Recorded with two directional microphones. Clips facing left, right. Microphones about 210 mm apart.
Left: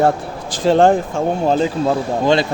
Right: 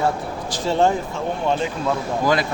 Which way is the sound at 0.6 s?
90° left.